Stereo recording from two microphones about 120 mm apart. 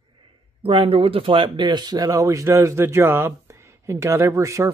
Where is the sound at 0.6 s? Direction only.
50° right (ahead or behind).